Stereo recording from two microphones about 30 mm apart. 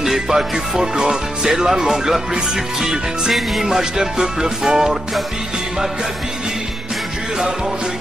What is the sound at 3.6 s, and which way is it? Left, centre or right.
Music, centre.